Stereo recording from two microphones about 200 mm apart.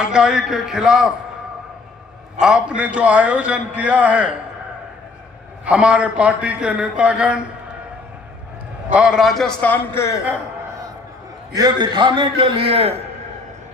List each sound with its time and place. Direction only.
0.0 s a man's voice: 5° right (ahead or behind)
2.4 s a man's voice: 5° right (ahead or behind)
5.6 s a man's voice: 5° right (ahead or behind)
8.9 s a man's voice: 5° right (ahead or behind); by 10.2 s 15° left (ahead or behind)
11.5 s a man's voice: 20° right (ahead or behind)